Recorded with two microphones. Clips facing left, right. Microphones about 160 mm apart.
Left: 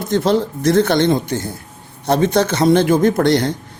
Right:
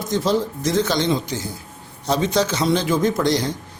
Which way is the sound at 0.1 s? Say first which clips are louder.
Left 4 dB; 60° left (ahead or behind).